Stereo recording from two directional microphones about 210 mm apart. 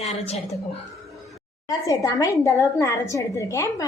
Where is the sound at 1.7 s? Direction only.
15° left (ahead or behind).